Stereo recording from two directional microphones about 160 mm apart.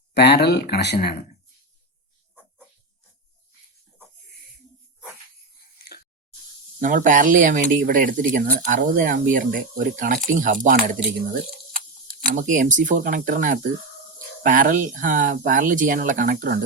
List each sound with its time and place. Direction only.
0.1 s speech: 90° left
6.7 s speech: 55° right (ahead or behind)
12.0 s speech: 60° right (ahead or behind)